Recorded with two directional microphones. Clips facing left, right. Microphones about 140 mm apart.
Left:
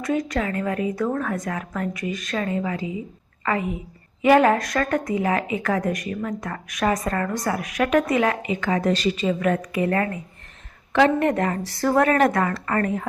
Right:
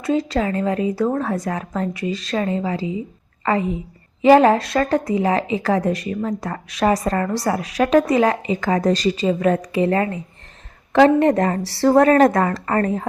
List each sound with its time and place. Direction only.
0.0 s a woman's voice: 30° right (ahead or behind)